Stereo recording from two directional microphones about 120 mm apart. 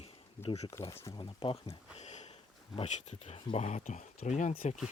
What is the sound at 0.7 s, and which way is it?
Speech, 25° left (ahead or behind).